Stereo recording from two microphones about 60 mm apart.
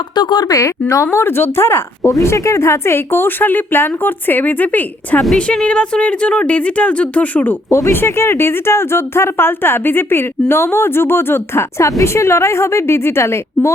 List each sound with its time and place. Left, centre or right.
0.4 s a woman's voice: left
1.1 s a woman's voice: left
2.0 s a woman's voice: left
5.4 s speech: centre
7.7 s a woman's voice: left
11.8 s a woman's voice: left